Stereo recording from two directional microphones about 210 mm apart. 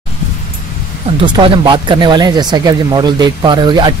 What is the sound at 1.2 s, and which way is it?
Speech, 20° right (ahead or behind).